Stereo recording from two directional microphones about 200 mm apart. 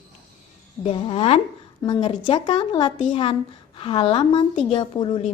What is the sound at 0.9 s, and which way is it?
A woman's voice, 30° left (ahead or behind).